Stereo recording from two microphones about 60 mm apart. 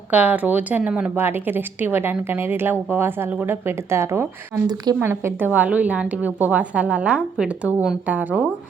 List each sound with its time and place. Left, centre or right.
0.1 s a woman's voice: right
1.1 s a woman's voice: right